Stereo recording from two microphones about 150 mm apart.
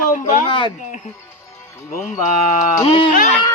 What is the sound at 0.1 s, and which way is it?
Speech, 55° left (ahead or behind).